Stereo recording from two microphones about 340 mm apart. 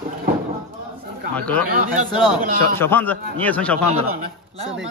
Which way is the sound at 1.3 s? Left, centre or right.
Centre.